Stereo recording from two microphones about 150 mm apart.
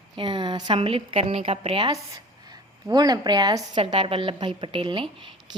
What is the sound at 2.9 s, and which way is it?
Speech, 25° right (ahead or behind).